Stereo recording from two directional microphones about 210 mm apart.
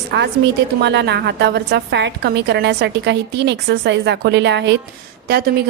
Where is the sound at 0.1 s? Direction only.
55° right (ahead or behind).